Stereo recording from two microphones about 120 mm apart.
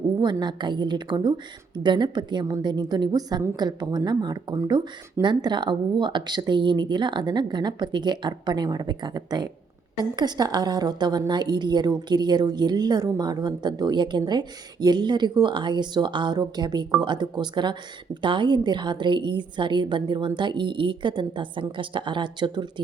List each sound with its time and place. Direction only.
0.2 s a woman's voice: 40° right (ahead or behind)